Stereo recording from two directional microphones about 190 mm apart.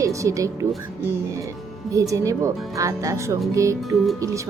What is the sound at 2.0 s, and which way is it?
Speech, 15° right (ahead or behind).